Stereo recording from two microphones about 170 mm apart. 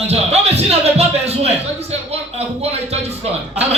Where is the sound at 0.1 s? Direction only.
40° right (ahead or behind).